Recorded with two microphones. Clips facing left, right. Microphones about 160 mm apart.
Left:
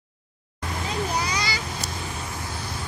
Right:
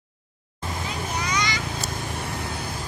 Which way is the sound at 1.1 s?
35° left (ahead or behind).